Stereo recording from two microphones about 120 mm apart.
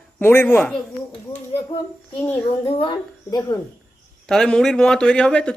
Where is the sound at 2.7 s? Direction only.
50° left (ahead or behind).